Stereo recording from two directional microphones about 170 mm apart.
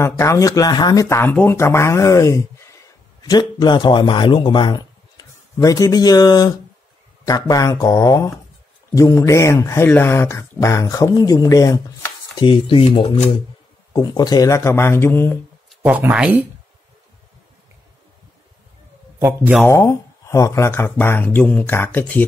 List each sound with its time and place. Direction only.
0.0 s a man's voice: 15° left (ahead or behind)
12.4 s speech: 30° left (ahead or behind); by 15.3 s 15° left (ahead or behind)
15.7 s speech: 10° right (ahead or behind)
19.1 s speech: 15° right (ahead or behind)
19.7 s speech: 15° left (ahead or behind)